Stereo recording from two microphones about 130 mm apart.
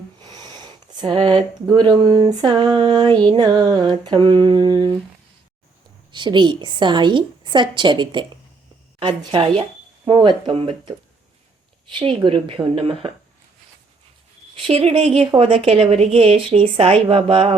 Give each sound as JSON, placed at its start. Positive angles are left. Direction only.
{"t": 0.2, "sound": "a sound", "side_deg": -30}
{"t": 1.7, "sound": "a woman's voice", "side_deg": -35}
{"t": 6.1, "sound": "a woman's voice", "side_deg": -35}
{"t": 14.7, "sound": "speech", "side_deg": -50}